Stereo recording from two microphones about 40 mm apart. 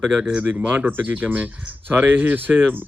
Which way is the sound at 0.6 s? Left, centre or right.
Right.